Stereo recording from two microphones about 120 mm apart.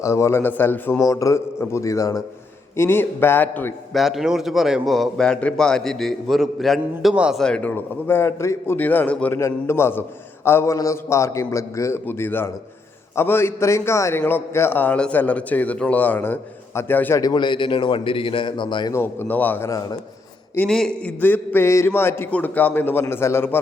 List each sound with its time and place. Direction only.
0.0 s a man's voice: 25° left (ahead or behind)
1.0 s a man's voice: 30° left (ahead or behind)
3.9 s a man's voice: centre (ahead or behind)
7.4 s a man's voice: 10° left (ahead or behind)
17.2 s a man's voice: 35° left (ahead or behind)
18.9 s a man's voice: 20° left (ahead or behind)
20.7 s a man's voice: 5° left (ahead or behind)